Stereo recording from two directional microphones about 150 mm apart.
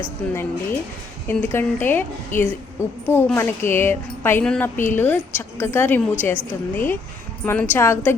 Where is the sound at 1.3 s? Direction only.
15° left (ahead or behind).